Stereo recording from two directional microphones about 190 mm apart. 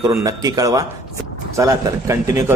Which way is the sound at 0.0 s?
15° right (ahead or behind).